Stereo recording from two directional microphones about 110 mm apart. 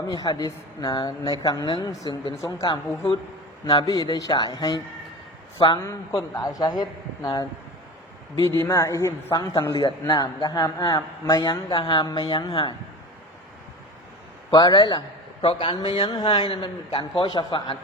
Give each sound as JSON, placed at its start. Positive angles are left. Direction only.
{"t": 0.1, "sound": "a man's voice", "side_deg": 40}
{"t": 3.8, "sound": "a man's voice", "side_deg": 35}
{"t": 5.5, "sound": "a man's voice", "side_deg": 50}
{"t": 5.8, "sound": "a man's voice", "side_deg": 30}
{"t": 8.4, "sound": "a man's voice", "side_deg": 25}
{"t": 11.7, "sound": "a man's voice", "side_deg": 45}
{"t": 14.5, "sound": "a man's voice", "side_deg": 40}
{"t": 16.5, "sound": "a man's voice", "side_deg": 50}